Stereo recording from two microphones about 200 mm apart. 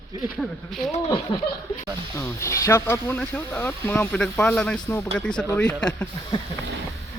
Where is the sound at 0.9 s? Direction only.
25° left (ahead or behind).